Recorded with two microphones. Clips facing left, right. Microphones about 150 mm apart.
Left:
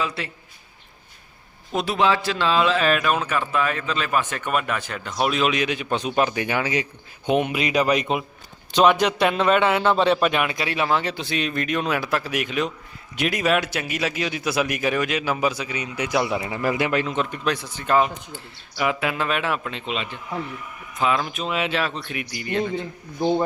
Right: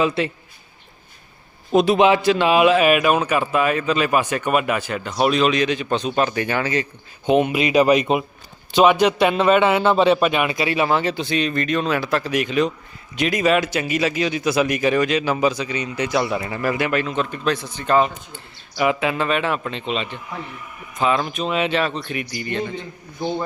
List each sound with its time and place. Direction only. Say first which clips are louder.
0.0 s a man's voice: right 8 dB; 20° right (ahead or behind)
1.7 s a man's voice: right 6 dB; 20° right (ahead or behind); by 6.8 s 10° left (ahead or behind)
7.4 s a man's voice: right 5 dB; 5° right (ahead or behind)